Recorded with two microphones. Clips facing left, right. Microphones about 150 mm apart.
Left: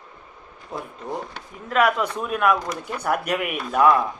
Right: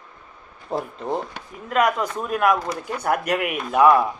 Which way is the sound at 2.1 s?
5° right (ahead or behind).